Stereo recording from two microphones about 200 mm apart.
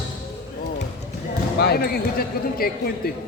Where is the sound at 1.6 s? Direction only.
50° left (ahead or behind).